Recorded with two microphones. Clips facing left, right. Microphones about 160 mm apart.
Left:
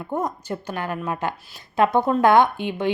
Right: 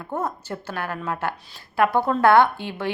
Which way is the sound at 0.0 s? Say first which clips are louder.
Left 2 dB; 15° left (ahead or behind).